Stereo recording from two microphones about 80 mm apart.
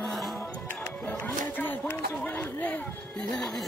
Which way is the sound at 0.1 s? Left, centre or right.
Centre.